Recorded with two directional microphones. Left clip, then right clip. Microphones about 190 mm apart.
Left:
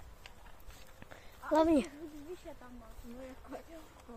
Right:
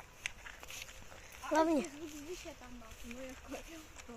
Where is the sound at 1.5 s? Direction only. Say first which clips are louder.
Left 3 dB; 35° left (ahead or behind).